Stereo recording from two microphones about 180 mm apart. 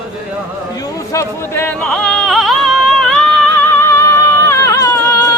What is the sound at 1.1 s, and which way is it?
Music, 15° left (ahead or behind).